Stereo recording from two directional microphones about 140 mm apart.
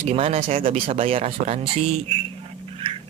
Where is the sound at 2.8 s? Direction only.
35° right (ahead or behind).